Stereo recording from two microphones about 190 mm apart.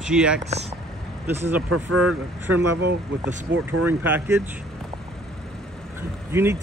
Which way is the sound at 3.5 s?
70° right (ahead or behind).